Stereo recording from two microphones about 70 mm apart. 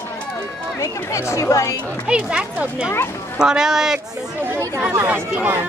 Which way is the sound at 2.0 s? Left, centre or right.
Centre.